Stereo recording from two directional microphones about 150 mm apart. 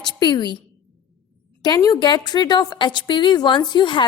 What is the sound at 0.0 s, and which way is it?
Speech, 30° left (ahead or behind).